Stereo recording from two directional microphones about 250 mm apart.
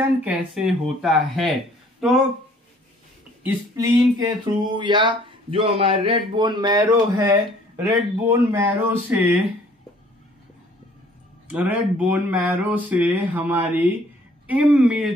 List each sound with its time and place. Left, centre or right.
0.2 s speech: centre
3.4 s speech: centre
11.4 s speech: centre